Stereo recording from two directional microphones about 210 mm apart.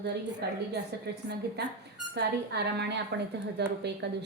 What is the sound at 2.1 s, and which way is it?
A woman's voice, 50° right (ahead or behind).